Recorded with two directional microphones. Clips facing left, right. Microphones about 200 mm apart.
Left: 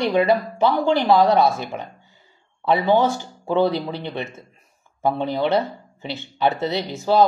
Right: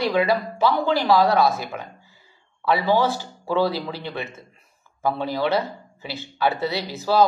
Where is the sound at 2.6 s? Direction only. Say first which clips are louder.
Left 2 dB; 20° left (ahead or behind).